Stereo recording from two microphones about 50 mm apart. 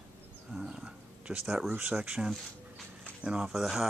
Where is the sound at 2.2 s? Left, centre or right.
Centre.